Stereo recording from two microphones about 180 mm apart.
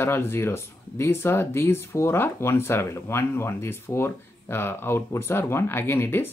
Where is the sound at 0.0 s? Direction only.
10° left (ahead or behind).